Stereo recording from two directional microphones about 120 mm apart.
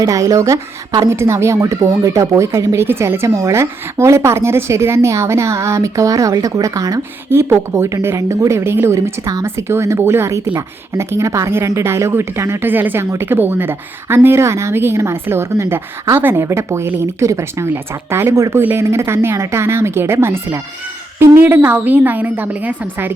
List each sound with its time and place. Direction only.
0.0 s a woman's voice: 30° right (ahead or behind)